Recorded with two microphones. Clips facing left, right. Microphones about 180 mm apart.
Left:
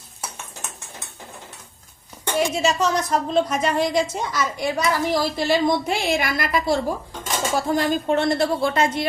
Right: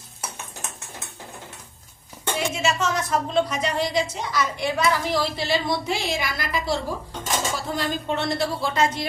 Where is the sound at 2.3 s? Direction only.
35° left (ahead or behind).